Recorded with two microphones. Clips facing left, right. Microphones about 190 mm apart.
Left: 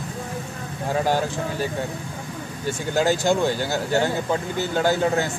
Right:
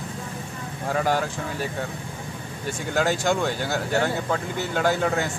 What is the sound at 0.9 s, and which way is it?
Speech, 30° left (ahead or behind).